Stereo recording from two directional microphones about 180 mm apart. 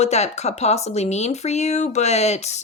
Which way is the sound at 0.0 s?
40° left (ahead or behind).